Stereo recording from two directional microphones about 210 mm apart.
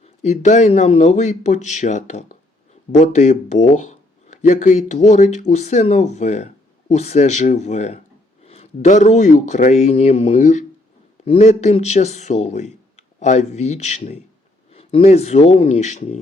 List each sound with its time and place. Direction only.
0.0 s speech: 30° left (ahead or behind)